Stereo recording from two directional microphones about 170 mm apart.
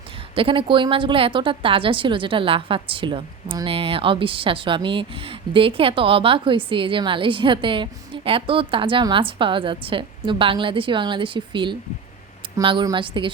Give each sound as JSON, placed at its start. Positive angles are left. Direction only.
{"t": 0.3, "sound": "a woman's voice", "side_deg": -30}